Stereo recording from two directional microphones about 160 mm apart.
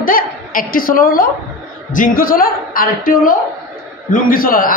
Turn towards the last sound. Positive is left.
turn(degrees=60)  # may be behind; listen again after turning